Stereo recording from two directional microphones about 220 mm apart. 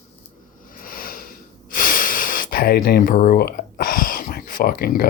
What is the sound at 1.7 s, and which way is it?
Speech, 40° left (ahead or behind).